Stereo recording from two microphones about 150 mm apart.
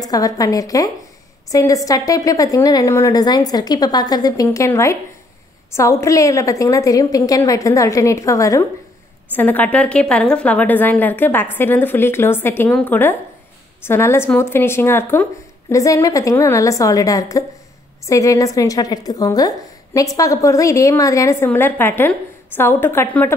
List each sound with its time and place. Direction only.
0.0 s a woman's voice: 25° left (ahead or behind)